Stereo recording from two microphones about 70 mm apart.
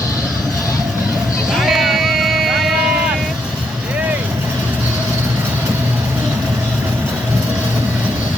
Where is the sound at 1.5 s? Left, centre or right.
Centre.